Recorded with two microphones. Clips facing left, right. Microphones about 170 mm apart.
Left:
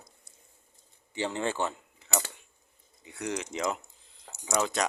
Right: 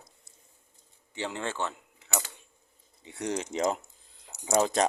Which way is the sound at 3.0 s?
25° right (ahead or behind).